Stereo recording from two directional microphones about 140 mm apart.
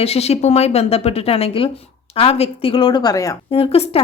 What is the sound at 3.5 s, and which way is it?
Speech, 45° left (ahead or behind).